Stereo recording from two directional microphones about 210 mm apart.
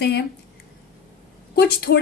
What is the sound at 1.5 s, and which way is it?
Speech, 50° left (ahead or behind).